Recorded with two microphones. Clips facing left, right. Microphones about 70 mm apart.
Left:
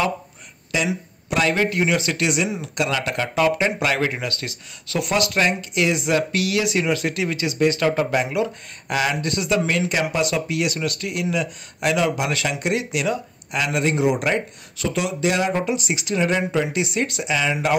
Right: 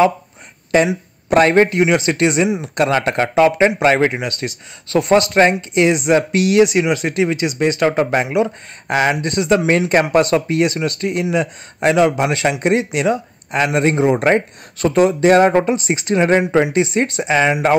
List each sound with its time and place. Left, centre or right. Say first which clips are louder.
0.7 s a man's voice: right 9 dB; right
1.7 s speech: right 6 dB; right
4.8 s speech: right 8 dB; right